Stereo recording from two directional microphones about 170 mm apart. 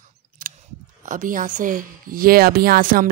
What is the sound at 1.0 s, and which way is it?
Speech, 50° right (ahead or behind).